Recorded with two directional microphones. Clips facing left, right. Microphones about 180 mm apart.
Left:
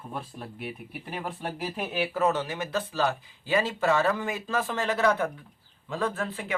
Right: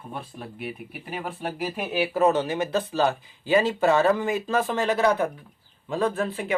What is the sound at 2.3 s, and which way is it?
Speech, 20° right (ahead or behind).